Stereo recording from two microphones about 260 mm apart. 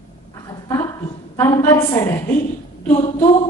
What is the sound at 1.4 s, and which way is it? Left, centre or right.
Speech, centre.